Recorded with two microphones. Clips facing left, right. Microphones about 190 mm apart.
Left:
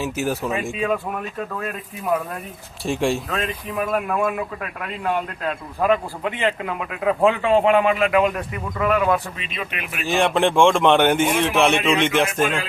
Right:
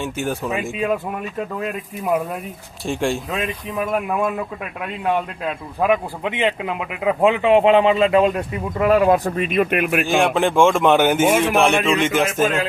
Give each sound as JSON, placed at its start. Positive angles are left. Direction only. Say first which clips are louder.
{"t": 0.0, "sound": "a man's voice", "louder": "even", "side_deg": 0}
{"t": 0.7, "sound": "speech", "louder": "right 2 dB", "side_deg": -15}
{"t": 2.8, "sound": "a man's voice", "louder": "even", "side_deg": 0}
{"t": 3.2, "sound": "speech", "louder": "right 1 dB", "side_deg": -10}
{"t": 5.5, "sound": "speech", "louder": "right 1 dB", "side_deg": -15}
{"t": 10.1, "sound": "a man's voice", "louder": "left 3 dB", "side_deg": 0}